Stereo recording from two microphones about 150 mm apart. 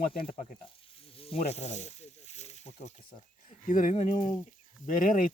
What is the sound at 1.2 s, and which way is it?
Snake, 40° left (ahead or behind).